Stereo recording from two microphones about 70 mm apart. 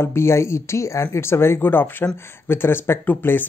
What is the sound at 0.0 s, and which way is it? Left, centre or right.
Speech, left.